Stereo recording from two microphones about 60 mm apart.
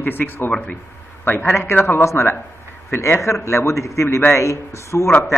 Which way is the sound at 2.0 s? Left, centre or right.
Left.